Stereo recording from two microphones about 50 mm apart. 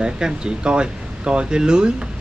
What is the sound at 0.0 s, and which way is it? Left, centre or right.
A man's voice, centre.